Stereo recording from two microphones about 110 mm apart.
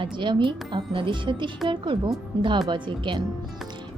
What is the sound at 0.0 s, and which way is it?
Speech, 45° right (ahead or behind).